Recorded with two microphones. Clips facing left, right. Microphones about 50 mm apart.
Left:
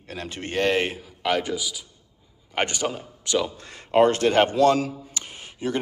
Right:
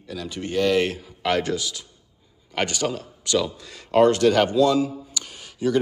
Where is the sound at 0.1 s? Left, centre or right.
Left.